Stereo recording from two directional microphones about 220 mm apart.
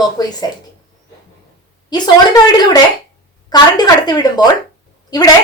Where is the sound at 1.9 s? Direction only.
20° left (ahead or behind).